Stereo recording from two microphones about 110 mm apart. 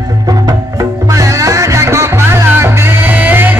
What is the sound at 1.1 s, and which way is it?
Music, 30° right (ahead or behind).